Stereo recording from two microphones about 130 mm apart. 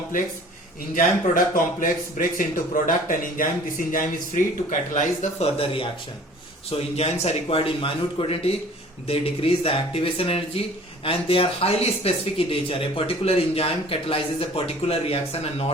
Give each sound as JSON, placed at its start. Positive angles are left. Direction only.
{"t": 0.9, "sound": "speech", "side_deg": 90}
{"t": 4.7, "sound": "speech", "side_deg": 70}
{"t": 5.5, "sound": "speech", "side_deg": 45}